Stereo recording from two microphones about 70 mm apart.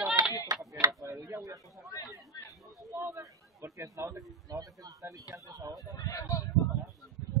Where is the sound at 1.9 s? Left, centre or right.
Left.